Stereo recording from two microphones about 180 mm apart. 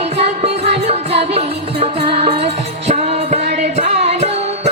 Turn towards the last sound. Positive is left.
turn(degrees=-35)  # may be behind; listen again after turning